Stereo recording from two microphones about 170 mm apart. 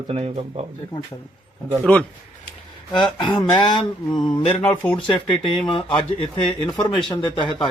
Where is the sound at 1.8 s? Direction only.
10° left (ahead or behind).